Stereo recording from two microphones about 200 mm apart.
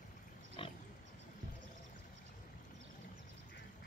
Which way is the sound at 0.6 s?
25° left (ahead or behind).